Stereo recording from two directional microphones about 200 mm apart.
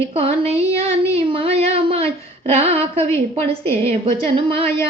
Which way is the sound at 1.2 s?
25° right (ahead or behind).